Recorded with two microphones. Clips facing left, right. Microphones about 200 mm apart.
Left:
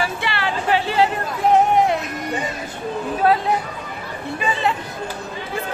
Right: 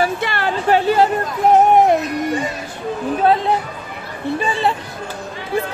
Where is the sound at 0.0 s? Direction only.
45° right (ahead or behind).